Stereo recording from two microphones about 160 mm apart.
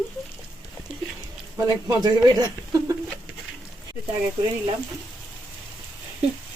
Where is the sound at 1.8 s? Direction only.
25° right (ahead or behind).